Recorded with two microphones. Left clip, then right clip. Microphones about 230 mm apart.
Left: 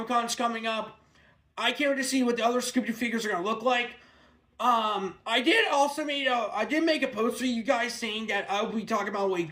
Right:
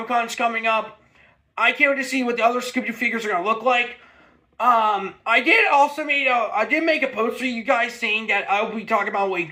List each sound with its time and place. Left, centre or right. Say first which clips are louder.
0.1 s speech: right 6 dB; left